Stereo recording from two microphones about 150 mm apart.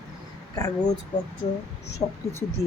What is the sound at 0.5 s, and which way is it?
Speech, 25° left (ahead or behind).